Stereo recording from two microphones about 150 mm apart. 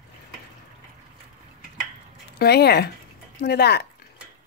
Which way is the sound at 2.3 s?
90° left.